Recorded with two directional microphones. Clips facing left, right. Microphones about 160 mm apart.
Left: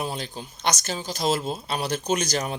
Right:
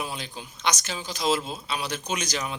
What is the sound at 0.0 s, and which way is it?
Speech, 40° left (ahead or behind).